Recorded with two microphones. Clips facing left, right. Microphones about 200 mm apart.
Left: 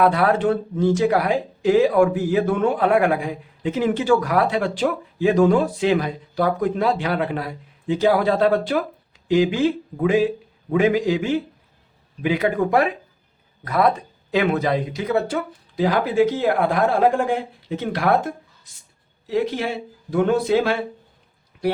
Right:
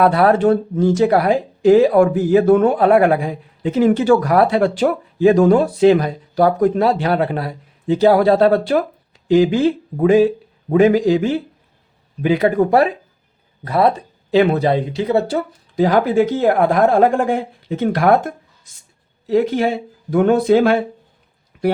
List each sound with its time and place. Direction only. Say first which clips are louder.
0.0 s speech: right 5 dB; 40° right (ahead or behind)
15.7 s speech: right 5 dB; 45° right (ahead or behind)
19.3 s speech: right 6 dB; 55° right (ahead or behind)